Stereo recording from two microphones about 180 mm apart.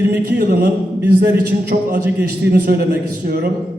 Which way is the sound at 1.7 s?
50° right (ahead or behind).